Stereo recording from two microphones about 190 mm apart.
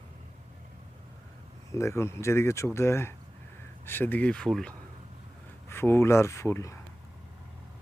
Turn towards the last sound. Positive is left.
turn(degrees=15)  # may be behind; listen again after turning